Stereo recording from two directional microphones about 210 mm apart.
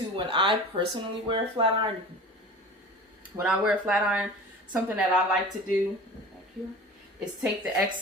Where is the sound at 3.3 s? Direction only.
5° right (ahead or behind).